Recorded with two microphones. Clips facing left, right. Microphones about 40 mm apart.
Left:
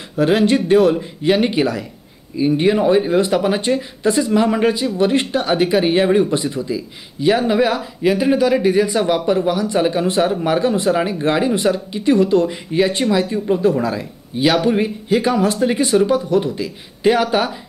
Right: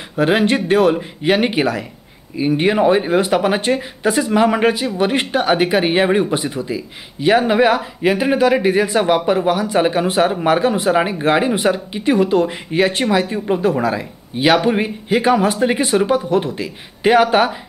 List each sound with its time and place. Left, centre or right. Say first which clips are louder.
0.1 s speech: even; centre